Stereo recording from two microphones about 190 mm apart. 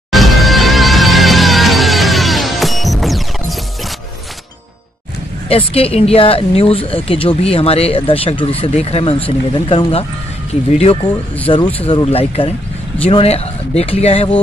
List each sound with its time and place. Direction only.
0.1 s music: centre (ahead or behind)
5.5 s speech: 30° left (ahead or behind)
11.4 s speech: 25° left (ahead or behind)